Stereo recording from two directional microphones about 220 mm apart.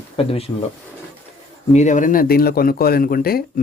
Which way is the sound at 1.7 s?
35° left (ahead or behind).